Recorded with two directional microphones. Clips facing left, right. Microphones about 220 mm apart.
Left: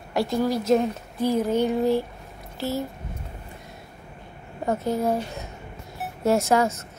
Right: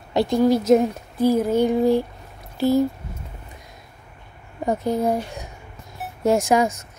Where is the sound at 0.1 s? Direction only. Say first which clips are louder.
Right 6 dB; 20° right (ahead or behind).